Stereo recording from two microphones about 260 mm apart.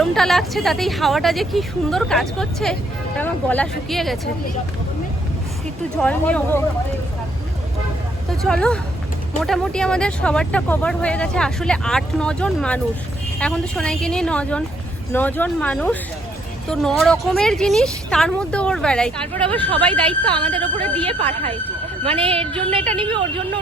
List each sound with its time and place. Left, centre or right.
0.0 s speech: centre
6.0 s speech: centre
8.3 s speech: centre
20.1 s a woman's voice: centre
20.6 s speech: centre
21.0 s a woman's voice: centre